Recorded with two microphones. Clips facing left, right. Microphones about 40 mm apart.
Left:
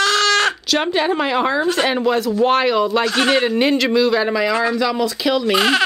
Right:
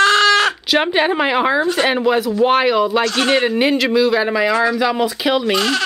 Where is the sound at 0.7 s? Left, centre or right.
Centre.